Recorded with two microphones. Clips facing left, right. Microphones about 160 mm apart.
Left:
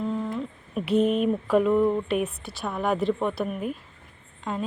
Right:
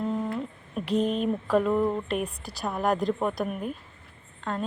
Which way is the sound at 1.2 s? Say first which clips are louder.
Left 3 dB; 5° left (ahead or behind).